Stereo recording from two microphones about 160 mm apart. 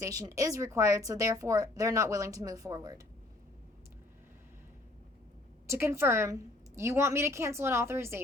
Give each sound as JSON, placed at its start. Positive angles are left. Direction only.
{"t": 0.0, "sound": "a woman's voice", "side_deg": -20}
{"t": 5.6, "sound": "a woman's voice", "side_deg": -15}